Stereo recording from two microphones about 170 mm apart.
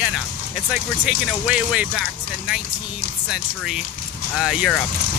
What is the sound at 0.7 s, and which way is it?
Speech, 5° right (ahead or behind).